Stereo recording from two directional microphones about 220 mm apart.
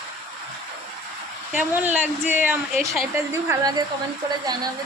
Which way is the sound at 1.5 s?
10° right (ahead or behind).